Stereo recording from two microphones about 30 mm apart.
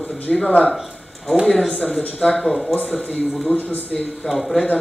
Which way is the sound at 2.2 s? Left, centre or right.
Centre.